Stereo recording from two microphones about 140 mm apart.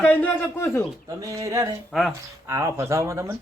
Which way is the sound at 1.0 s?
25° right (ahead or behind).